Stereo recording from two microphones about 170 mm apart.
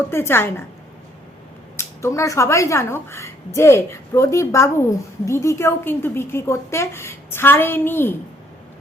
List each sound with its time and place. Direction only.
0.1 s speech: 15° left (ahead or behind)
1.7 s speech: 15° left (ahead or behind)